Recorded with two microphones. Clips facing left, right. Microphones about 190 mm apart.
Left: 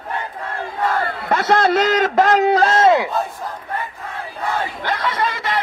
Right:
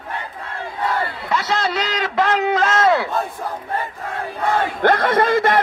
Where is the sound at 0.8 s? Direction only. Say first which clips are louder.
Left 2 dB; 55° left (ahead or behind); by 3.0 s 25° left (ahead or behind).